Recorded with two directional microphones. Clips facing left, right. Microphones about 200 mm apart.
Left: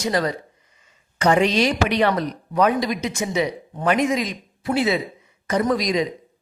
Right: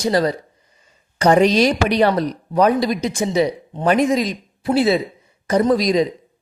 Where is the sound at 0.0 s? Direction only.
35° right (ahead or behind).